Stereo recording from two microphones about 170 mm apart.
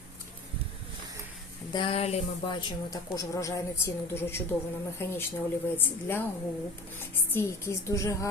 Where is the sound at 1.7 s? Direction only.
30° left (ahead or behind); by 6.2 s 10° left (ahead or behind).